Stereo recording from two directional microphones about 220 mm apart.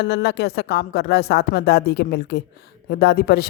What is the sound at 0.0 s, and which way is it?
Speech, 50° left (ahead or behind).